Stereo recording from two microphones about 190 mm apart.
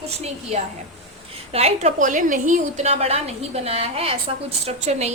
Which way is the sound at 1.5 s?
35° right (ahead or behind).